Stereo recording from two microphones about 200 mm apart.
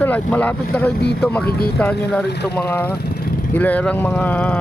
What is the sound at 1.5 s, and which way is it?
Speech, 50° left (ahead or behind).